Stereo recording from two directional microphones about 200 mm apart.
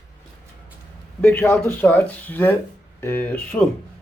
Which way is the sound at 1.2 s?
10° left (ahead or behind).